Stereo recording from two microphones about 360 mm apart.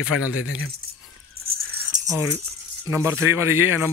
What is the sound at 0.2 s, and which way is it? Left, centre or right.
Speech, left.